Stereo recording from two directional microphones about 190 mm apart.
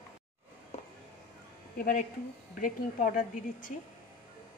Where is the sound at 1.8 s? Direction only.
50° left (ahead or behind).